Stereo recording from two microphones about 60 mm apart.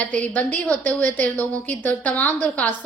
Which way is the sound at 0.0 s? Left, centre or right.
Left.